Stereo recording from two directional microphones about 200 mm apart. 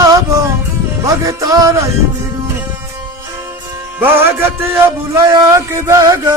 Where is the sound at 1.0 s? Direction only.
15° right (ahead or behind).